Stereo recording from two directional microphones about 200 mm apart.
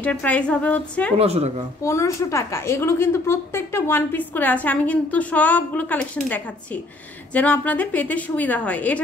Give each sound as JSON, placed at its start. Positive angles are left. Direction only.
{"t": 0.0, "sound": "a woman's voice", "side_deg": 10}
{"t": 1.1, "sound": "a woman's voice", "side_deg": -30}
{"t": 1.8, "sound": "a woman's voice", "side_deg": 15}